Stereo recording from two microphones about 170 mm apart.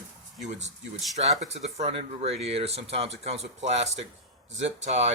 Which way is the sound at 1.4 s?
40° right (ahead or behind).